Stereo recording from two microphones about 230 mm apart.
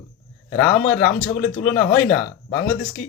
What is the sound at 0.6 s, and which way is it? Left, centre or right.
Speech, left.